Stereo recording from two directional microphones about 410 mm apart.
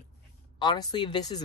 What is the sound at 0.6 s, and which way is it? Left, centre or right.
Speech, centre.